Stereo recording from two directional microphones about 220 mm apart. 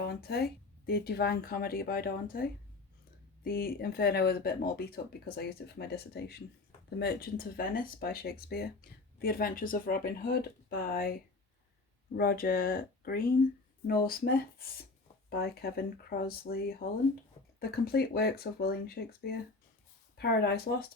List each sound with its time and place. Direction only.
0.1 s speech: 45° left (ahead or behind)
12.1 s speech: 45° left (ahead or behind)